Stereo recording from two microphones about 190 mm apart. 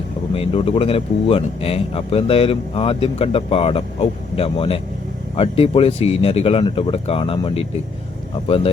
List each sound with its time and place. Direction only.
0.3 s speech: 30° left (ahead or behind)